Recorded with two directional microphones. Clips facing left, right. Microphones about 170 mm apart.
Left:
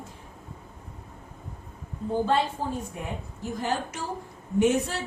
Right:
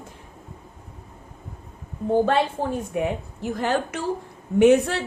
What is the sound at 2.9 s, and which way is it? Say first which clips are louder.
A woman's voice: right 10 dB; 75° right (ahead or behind).